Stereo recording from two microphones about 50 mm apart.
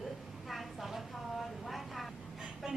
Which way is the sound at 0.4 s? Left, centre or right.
Centre.